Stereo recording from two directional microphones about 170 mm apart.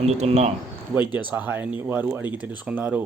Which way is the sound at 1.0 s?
10° right (ahead or behind).